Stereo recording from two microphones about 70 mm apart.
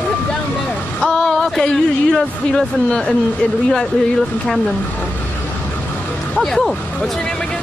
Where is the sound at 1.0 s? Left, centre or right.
Centre.